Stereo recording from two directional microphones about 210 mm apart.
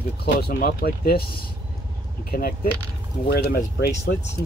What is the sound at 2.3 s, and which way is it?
Speech, 45° left (ahead or behind).